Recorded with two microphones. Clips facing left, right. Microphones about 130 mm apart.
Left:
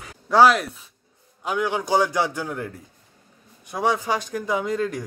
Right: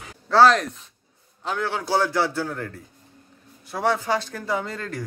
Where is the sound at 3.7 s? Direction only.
15° left (ahead or behind).